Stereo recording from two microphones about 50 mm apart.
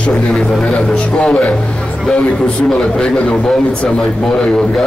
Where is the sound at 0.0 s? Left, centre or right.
Left.